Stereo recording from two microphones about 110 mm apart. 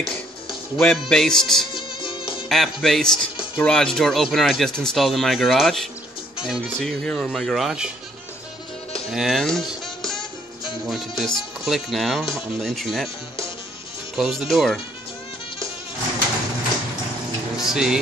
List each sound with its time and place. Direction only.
0.0 s speech: centre (ahead or behind)
1.7 s music: 45° left (ahead or behind)
2.5 s speech: centre (ahead or behind)
9.1 s speech: centre (ahead or behind)
14.1 s speech: 5° right (ahead or behind)
17.6 s speech: 5° right (ahead or behind)